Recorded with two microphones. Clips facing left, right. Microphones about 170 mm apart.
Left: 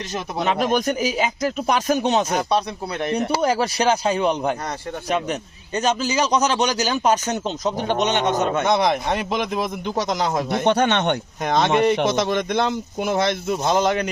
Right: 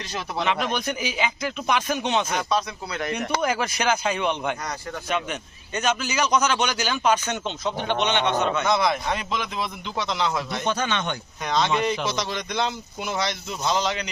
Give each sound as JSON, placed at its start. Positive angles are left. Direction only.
{"t": 0.4, "sound": "a man's voice", "side_deg": 45}